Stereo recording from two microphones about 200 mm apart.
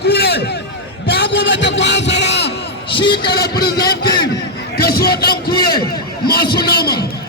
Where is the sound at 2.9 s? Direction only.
25° left (ahead or behind).